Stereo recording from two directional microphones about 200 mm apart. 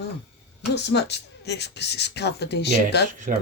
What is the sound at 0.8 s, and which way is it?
Speech, 55° left (ahead or behind).